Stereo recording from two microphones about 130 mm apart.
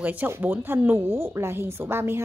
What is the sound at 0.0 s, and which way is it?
A woman's voice, 15° right (ahead or behind).